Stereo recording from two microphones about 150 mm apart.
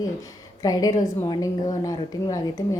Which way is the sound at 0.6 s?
25° left (ahead or behind).